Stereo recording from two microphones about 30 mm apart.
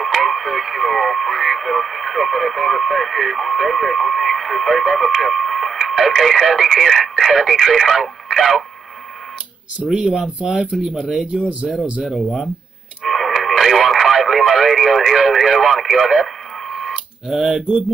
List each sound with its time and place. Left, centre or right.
0.1 s speech: centre
9.9 s speech: right
11.0 s speech: centre
13.1 s radio: centre
16.9 s a sound: centre